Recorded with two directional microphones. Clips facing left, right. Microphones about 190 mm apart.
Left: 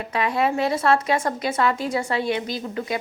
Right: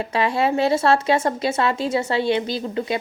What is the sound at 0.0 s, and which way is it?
A woman's voice, 30° right (ahead or behind).